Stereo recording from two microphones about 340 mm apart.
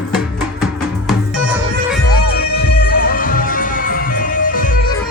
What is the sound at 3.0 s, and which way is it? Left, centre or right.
Music, left.